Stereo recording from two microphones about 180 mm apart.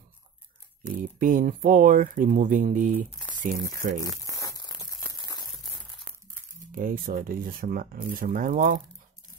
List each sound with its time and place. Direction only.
0.8 s speech: 50° right (ahead or behind)
4.4 s a sound: 20° left (ahead or behind)
6.7 s speech: 50° right (ahead or behind)